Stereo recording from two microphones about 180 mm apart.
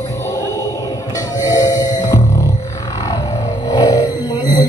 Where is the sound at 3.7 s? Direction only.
20° left (ahead or behind).